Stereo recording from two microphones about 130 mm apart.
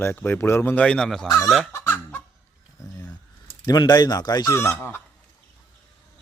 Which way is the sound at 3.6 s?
30° left (ahead or behind).